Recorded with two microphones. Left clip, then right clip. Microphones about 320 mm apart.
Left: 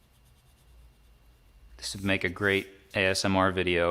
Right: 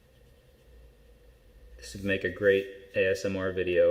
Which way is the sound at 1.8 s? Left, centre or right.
Centre.